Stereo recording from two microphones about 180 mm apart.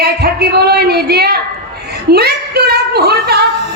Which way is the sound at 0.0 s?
65° right (ahead or behind).